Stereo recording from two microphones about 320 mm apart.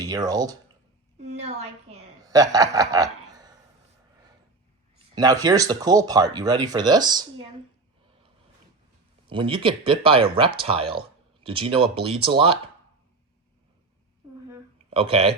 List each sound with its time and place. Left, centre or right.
0.0 s a woman's voice: centre
5.1 s speech: centre
9.2 s speech: centre
14.8 s speech: centre